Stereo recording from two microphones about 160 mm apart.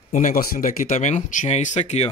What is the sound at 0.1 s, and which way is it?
Speech, 60° left (ahead or behind).